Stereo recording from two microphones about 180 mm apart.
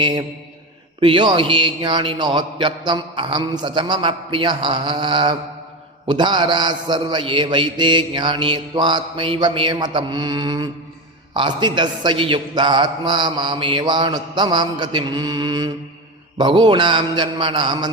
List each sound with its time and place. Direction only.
0.0 s a man's voice: 25° right (ahead or behind)